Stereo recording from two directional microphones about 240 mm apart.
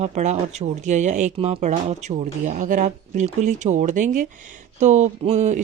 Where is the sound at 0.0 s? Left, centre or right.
Right.